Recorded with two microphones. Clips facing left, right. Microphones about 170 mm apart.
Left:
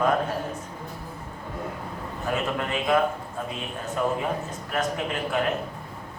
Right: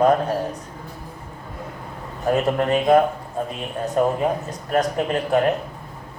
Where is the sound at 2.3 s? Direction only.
40° right (ahead or behind).